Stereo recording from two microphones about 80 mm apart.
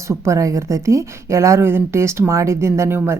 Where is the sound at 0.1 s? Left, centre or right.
Right.